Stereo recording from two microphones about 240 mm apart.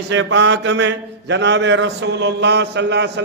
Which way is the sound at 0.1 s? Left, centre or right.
Right.